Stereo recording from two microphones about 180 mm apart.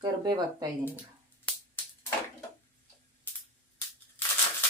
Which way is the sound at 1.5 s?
10° left (ahead or behind).